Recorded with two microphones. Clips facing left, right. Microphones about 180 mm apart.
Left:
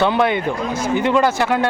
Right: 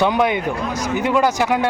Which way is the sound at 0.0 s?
15° right (ahead or behind).